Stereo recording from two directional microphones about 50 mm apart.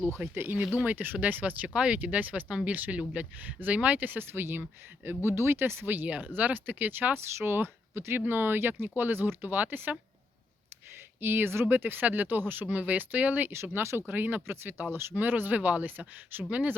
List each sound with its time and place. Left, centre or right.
0.2 s speech: right
3.3 s speech: right
5.9 s speech: right
7.3 s speech: right
11.2 s speech: right
13.5 s speech: right
14.1 s speech: right
14.4 s speech: right
15.1 s speech: right